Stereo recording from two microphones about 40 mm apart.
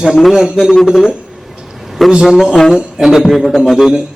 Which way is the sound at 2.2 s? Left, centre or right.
Centre.